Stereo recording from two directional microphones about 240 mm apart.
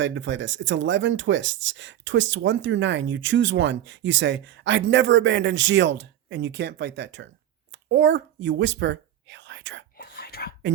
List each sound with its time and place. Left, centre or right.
0.0 s speech: right
10.0 s whispering: left